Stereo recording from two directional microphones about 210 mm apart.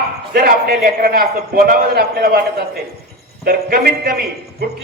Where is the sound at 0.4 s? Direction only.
45° right (ahead or behind).